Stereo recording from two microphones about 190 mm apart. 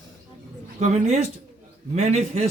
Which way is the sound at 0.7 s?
35° right (ahead or behind).